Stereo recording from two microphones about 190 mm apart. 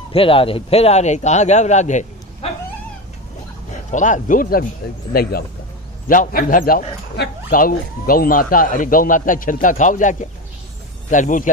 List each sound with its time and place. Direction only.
0.1 s a man's voice: 30° left (ahead or behind)
3.9 s speech: 40° left (ahead or behind)